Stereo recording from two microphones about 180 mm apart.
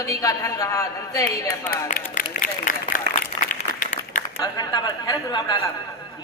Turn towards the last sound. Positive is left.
turn(degrees=25)  # may be behind; listen again after turning